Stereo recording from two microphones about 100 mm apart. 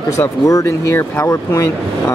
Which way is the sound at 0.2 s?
35° left (ahead or behind).